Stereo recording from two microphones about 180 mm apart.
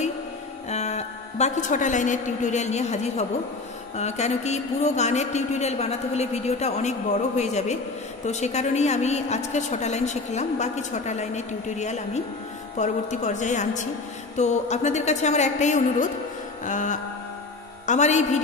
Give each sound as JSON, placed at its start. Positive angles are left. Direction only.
{"t": 0.7, "sound": "a woman's voice", "side_deg": 40}
{"t": 16.6, "sound": "music", "side_deg": 45}
{"t": 17.8, "sound": "a woman's voice", "side_deg": 40}